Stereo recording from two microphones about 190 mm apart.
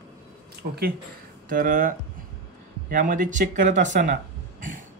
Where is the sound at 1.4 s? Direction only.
45° right (ahead or behind).